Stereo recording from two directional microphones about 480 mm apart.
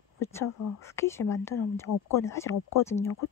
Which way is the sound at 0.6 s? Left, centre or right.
Left.